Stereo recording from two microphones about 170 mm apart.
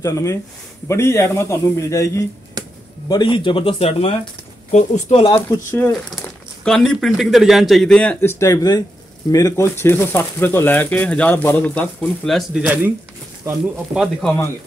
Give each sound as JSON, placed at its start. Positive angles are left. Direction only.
{"t": 0.0, "sound": "a man's voice", "side_deg": 20}
{"t": 5.7, "sound": "speech", "side_deg": 10}
{"t": 13.9, "sound": "speech", "side_deg": 0}